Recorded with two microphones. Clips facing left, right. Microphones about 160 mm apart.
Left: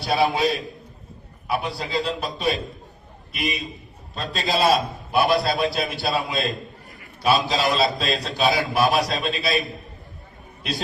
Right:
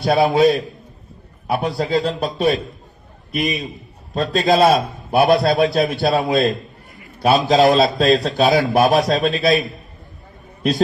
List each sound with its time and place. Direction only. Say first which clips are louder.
0.0 s a man's voice: right 7 dB; 45° right (ahead or behind)